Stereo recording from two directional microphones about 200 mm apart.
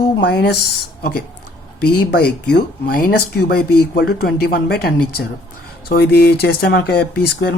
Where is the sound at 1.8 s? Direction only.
50° left (ahead or behind).